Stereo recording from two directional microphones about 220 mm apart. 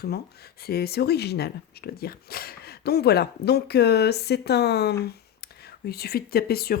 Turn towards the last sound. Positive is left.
turn(degrees=45)  # may be behind; listen again after turning